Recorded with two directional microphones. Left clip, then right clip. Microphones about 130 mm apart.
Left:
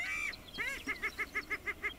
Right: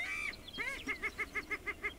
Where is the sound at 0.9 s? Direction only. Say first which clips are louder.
Left 1 dB; 10° left (ahead or behind).